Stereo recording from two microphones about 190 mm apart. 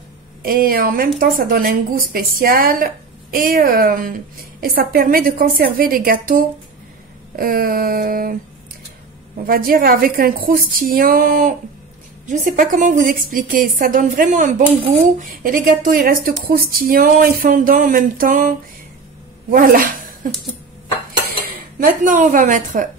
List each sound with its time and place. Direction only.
0.4 s a woman's voice: 50° right (ahead or behind)
9.4 s a woman's voice: 50° right (ahead or behind)
19.5 s a woman's voice: 45° right (ahead or behind)
21.7 s a woman's voice: 45° right (ahead or behind)